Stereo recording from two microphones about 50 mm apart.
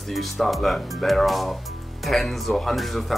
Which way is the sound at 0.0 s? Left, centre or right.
Centre.